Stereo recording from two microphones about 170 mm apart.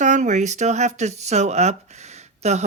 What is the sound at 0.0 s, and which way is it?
Speech, 45° right (ahead or behind).